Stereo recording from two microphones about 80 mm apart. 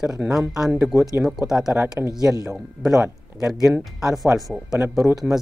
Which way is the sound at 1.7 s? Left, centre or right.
Right.